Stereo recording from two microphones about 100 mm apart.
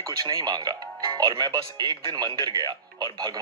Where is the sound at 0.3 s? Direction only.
40° right (ahead or behind).